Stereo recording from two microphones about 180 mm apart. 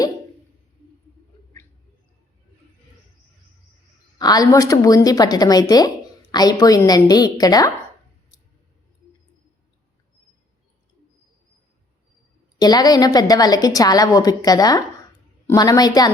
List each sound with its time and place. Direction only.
4.2 s a woman's voice: 20° left (ahead or behind)
12.5 s a woman's voice: 20° left (ahead or behind)